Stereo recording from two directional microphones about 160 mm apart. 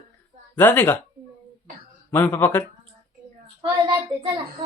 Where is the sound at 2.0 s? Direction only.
15° left (ahead or behind).